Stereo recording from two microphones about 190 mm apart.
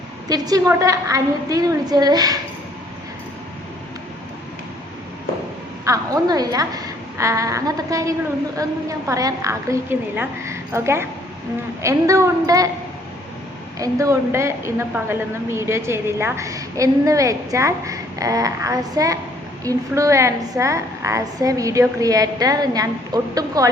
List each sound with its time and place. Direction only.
0.3 s a woman's voice: 20° right (ahead or behind)
5.8 s a woman's voice: 15° right (ahead or behind)
13.7 s a woman's voice: 15° right (ahead or behind)